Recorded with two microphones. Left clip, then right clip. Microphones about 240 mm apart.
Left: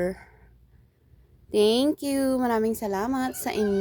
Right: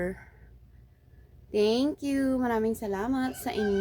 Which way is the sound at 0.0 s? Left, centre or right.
Left.